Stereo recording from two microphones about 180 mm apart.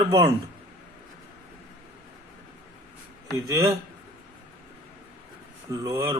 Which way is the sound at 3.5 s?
15° right (ahead or behind).